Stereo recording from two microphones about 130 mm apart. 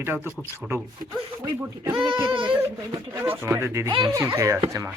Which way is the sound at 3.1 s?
15° right (ahead or behind).